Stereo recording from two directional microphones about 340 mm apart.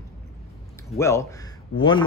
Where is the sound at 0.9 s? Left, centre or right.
Centre.